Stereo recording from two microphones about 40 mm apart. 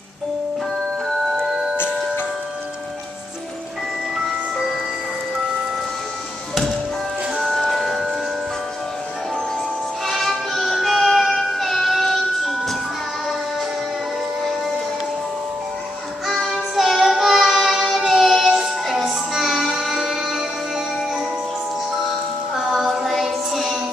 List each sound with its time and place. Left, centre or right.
6.5 s music: centre
10.0 s music: centre
16.3 s child singing: centre
18.0 s music: centre
22.9 s music: centre